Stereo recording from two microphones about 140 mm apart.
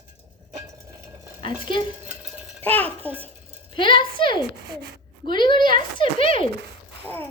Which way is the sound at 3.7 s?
35° left (ahead or behind).